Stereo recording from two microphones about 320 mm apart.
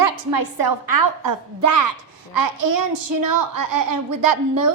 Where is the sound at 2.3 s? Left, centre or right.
Right.